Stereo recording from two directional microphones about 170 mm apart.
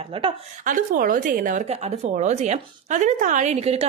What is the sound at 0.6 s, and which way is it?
A woman's voice, 50° right (ahead or behind).